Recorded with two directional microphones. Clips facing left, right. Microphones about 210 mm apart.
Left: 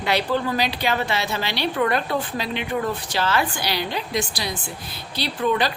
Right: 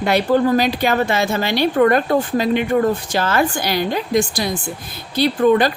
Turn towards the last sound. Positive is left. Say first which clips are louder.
# right 8 dB
turn(degrees=-50)  # may be behind; listen again after turning